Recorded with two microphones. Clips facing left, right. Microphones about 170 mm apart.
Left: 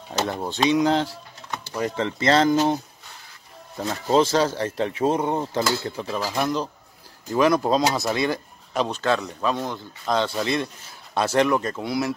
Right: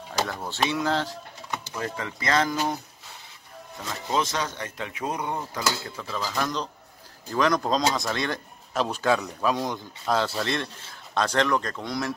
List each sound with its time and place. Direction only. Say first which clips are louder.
0.2 s speech: left 4 dB; 20° left (ahead or behind)
2.0 s speech: left 6 dB; 30° left (ahead or behind); by 12.2 s 5° left (ahead or behind)